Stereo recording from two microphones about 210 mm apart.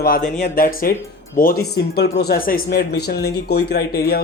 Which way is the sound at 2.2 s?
45° left (ahead or behind).